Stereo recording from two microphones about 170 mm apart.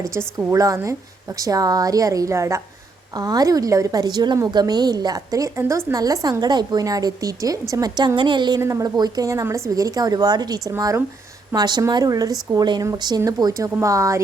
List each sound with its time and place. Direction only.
0.0 s a woman's voice: 15° right (ahead or behind)